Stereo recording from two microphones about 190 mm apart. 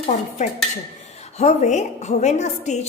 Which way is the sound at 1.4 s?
35° left (ahead or behind).